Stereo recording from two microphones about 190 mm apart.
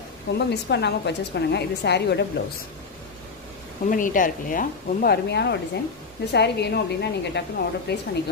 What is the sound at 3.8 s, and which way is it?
A woman's voice, 45° left (ahead or behind).